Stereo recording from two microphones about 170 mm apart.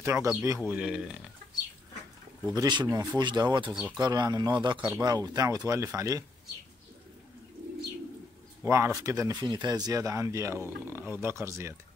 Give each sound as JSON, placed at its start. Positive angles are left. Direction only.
{"t": 0.0, "sound": "speech", "side_deg": -15}
{"t": 0.6, "sound": "a man's voice", "side_deg": -5}
{"t": 2.5, "sound": "speech", "side_deg": -25}
{"t": 3.7, "sound": "a man's voice", "side_deg": -5}
{"t": 4.0, "sound": "speech", "side_deg": -25}
{"t": 8.6, "sound": "speech", "side_deg": -15}